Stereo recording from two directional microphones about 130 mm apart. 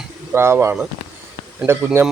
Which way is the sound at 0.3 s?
20° right (ahead or behind).